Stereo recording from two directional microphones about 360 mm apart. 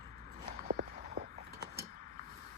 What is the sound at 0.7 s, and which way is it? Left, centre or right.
Walk, right.